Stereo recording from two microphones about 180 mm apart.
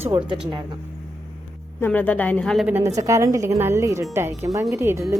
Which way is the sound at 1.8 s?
10° left (ahead or behind).